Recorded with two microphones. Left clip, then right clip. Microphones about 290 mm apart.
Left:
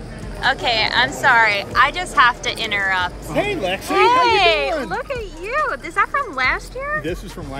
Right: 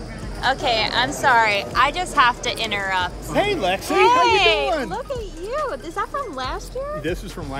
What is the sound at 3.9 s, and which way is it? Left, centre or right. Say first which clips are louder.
Speech: left 2 dB; centre.